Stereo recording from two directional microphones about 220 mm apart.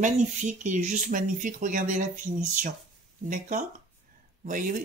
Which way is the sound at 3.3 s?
35° right (ahead or behind).